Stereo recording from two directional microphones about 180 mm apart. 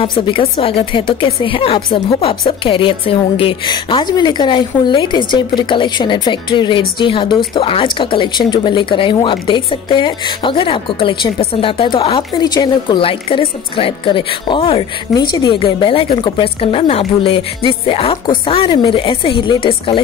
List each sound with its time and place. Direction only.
0.3 s a woman's voice: 30° left (ahead or behind)